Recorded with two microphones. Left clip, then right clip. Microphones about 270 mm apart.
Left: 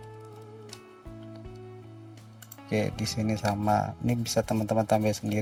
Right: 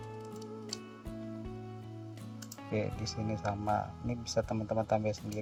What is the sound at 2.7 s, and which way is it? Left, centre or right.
Speech, left.